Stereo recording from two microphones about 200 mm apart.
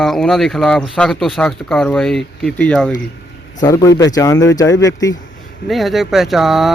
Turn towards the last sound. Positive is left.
turn(degrees=0)  # may be behind; listen again after turning